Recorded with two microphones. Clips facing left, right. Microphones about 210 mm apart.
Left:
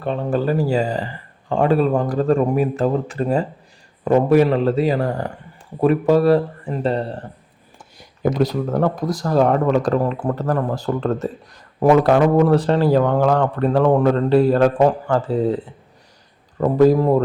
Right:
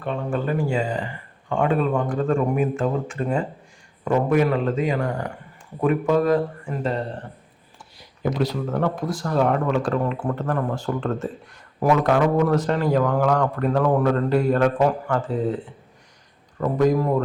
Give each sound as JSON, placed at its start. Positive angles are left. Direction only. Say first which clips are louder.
{"t": 0.0, "sound": "speech", "louder": "left 5 dB", "side_deg": 35}
{"t": 7.8, "sound": "speech", "louder": "left 5 dB", "side_deg": 45}